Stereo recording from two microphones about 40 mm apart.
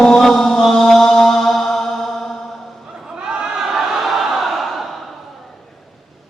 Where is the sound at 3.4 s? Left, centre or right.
Centre.